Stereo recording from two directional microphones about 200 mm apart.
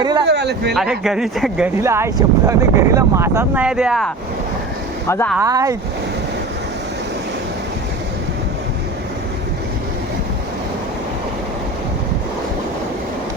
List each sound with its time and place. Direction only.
0.0 s speech: 20° right (ahead or behind)
0.3 s speech: 60° right (ahead or behind)
0.7 s speech: centre (ahead or behind)
5.0 s speech: 15° left (ahead or behind)
5.4 s speech: 15° right (ahead or behind)